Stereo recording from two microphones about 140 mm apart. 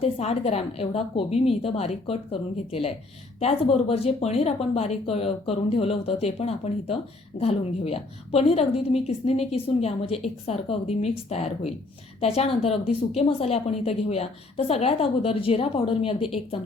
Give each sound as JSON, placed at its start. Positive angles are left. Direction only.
{"t": 0.0, "sound": "speech", "side_deg": 50}